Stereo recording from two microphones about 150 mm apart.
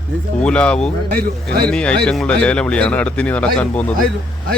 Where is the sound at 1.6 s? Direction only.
5° left (ahead or behind).